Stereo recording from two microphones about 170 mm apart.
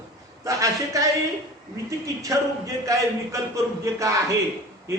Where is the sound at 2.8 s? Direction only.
20° right (ahead or behind).